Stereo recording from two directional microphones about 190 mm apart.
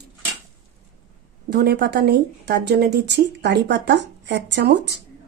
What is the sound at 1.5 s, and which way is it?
Speech, 60° right (ahead or behind).